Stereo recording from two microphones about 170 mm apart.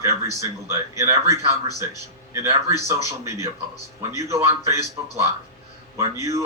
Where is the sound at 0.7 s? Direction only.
15° right (ahead or behind).